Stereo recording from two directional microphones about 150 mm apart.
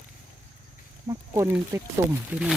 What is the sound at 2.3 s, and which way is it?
Speech, 10° right (ahead or behind).